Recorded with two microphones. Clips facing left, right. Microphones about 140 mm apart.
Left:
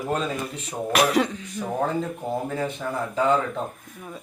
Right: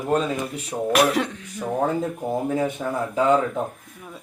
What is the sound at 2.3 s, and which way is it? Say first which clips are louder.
Speech: right 5 dB; 15° right (ahead or behind).